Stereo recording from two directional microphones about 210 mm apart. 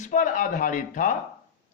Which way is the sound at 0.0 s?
35° left (ahead or behind).